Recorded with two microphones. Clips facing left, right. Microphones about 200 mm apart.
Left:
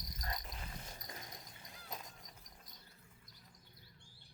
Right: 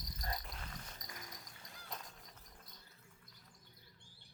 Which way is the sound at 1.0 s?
25° left (ahead or behind).